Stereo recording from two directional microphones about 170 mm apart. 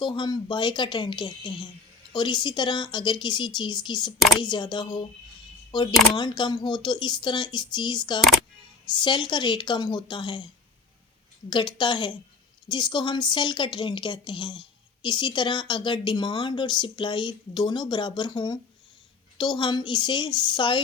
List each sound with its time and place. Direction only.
0.0 s a woman's voice: 25° left (ahead or behind)
11.4 s a woman's voice: 25° left (ahead or behind)